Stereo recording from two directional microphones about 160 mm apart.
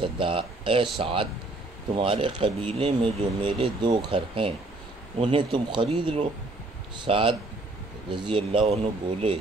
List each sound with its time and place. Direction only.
0.0 s speech: 35° right (ahead or behind)